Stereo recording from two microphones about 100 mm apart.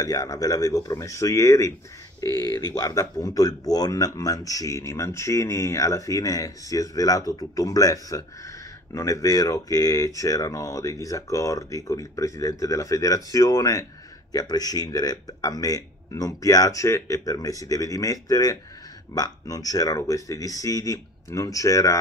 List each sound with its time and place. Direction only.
0.0 s speech: 40° left (ahead or behind)